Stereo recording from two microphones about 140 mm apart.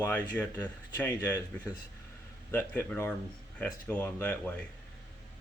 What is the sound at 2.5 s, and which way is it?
Speech, 15° left (ahead or behind).